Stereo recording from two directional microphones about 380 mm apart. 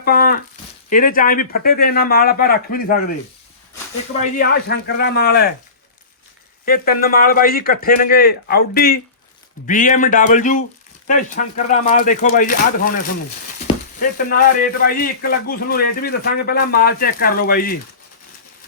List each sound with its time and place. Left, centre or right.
0.0 s a sound: left
0.9 s a man's voice: left
4.2 s a man's voice: left
6.7 s a man's voice: left
13.7 s a sound: centre
14.0 s a man's voice: left